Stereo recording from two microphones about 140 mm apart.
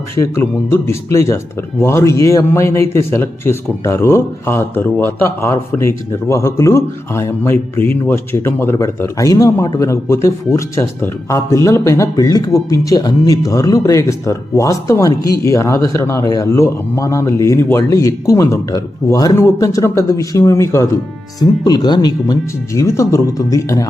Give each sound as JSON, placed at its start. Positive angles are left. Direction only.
{"t": 0.2, "sound": "a man's voice", "side_deg": 20}